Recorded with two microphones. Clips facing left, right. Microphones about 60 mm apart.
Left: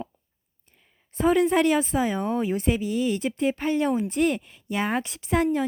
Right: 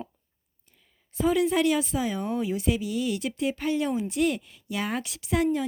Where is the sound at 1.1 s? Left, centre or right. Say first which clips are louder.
Left 3 dB; left.